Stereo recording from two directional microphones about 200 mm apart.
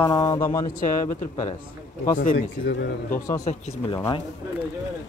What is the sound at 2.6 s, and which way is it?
Speech, 60° left (ahead or behind).